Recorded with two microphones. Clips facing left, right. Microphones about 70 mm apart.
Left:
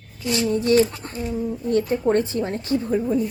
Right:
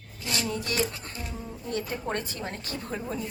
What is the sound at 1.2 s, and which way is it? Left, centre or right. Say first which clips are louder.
A woman's voice: left 15 dB; left.